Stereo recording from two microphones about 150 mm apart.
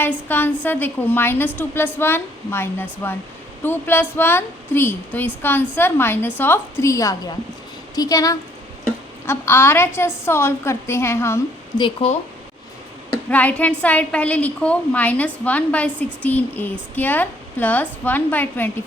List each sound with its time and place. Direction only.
0.0 s a woman's voice: 15° left (ahead or behind)
12.0 s speech: 40° left (ahead or behind)
13.3 s a woman's voice: 10° left (ahead or behind)